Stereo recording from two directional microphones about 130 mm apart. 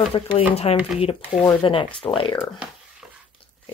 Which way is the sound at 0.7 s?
50° left (ahead or behind).